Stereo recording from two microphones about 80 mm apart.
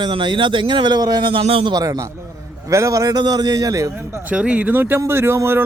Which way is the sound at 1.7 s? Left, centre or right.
Right.